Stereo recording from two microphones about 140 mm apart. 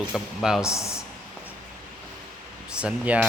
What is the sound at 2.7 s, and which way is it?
Speech, 5° right (ahead or behind).